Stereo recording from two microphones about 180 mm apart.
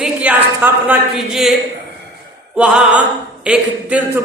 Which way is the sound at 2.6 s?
5° right (ahead or behind).